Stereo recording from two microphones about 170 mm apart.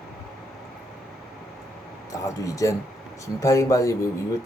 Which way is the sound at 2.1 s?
20° left (ahead or behind).